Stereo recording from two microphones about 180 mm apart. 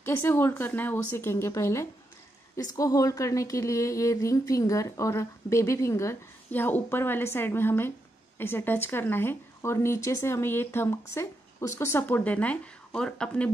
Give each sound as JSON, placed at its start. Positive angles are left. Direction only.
{"t": 0.0, "sound": "speech", "side_deg": 10}